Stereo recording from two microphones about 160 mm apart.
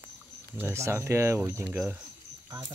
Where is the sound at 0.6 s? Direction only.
15° right (ahead or behind).